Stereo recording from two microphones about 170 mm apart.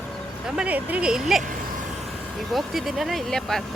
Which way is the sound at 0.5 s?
10° right (ahead or behind).